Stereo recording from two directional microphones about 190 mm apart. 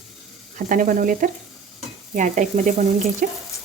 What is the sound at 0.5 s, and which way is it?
Speech, 45° right (ahead or behind).